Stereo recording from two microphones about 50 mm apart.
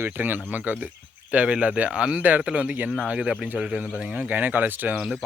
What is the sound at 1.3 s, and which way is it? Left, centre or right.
Speech, right.